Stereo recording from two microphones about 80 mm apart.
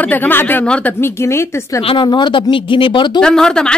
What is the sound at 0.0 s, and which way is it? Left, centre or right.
A woman's voice, left.